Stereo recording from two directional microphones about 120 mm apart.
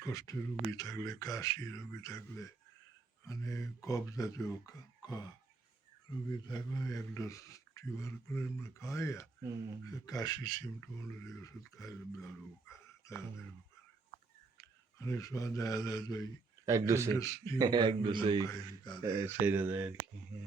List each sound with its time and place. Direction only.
0.0 s speech: 30° left (ahead or behind)
6.5 s speech: 30° left (ahead or behind)
14.6 s speech: 25° left (ahead or behind)
16.6 s speech: 25° right (ahead or behind)
17.2 s speech: 25° left (ahead or behind)
17.6 s a man's voice: 35° right (ahead or behind)
18.5 s speech: 40° left (ahead or behind)
19.0 s speech: 20° right (ahead or behind)